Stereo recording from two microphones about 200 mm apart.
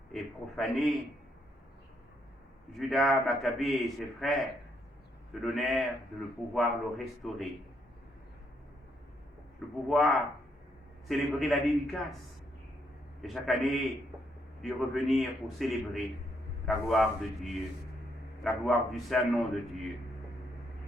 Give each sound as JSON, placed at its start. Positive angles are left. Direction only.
{"t": 0.1, "sound": "a man's voice", "side_deg": 0}
{"t": 2.7, "sound": "a man's voice", "side_deg": 0}
{"t": 9.8, "sound": "a man's voice", "side_deg": 0}
{"t": 11.3, "sound": "a man's voice", "side_deg": 0}
{"t": 13.2, "sound": "a man's voice", "side_deg": 0}